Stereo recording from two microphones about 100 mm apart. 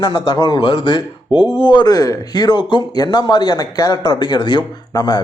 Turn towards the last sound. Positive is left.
turn(degrees=45)  # may be behind; listen again after turning